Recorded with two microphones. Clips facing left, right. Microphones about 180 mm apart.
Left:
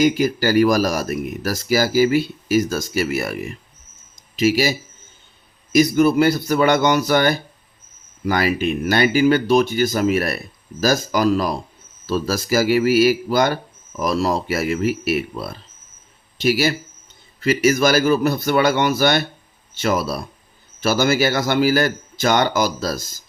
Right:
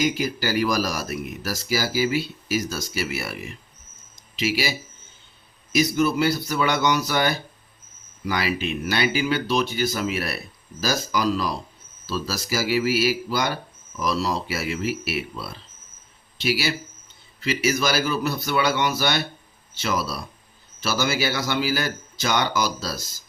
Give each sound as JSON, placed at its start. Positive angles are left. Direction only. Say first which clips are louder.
{"t": 0.0, "sound": "speech", "louder": "left 7 dB", "side_deg": 50}
{"t": 5.7, "sound": "speech", "louder": "left 6 dB", "side_deg": 50}